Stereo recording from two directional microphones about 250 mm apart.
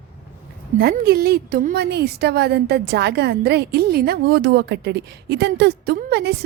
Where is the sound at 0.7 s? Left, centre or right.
Right.